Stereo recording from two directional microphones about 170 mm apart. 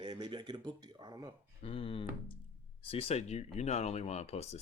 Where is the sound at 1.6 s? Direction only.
35° left (ahead or behind).